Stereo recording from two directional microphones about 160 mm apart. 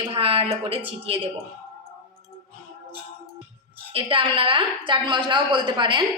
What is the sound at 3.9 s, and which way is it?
A woman's voice, 35° right (ahead or behind).